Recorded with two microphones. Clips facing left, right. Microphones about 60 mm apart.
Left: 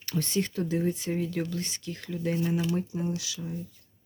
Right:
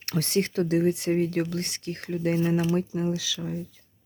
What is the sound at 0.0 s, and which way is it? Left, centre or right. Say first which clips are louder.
Speech: right 3 dB; right.